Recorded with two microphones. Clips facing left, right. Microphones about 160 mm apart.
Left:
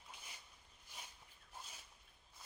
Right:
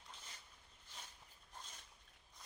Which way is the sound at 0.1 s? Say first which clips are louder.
Left 1 dB; 10° left (ahead or behind).